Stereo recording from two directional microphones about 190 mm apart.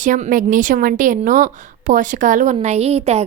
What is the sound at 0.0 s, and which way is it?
Speech, 45° right (ahead or behind).